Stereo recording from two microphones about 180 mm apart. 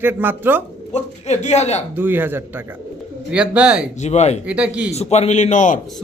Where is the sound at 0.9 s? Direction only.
40° left (ahead or behind).